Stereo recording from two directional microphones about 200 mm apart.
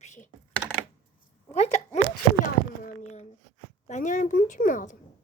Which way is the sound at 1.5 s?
35° left (ahead or behind).